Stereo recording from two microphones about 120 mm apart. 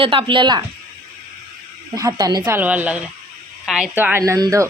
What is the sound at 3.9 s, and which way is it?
Speech, 15° right (ahead or behind).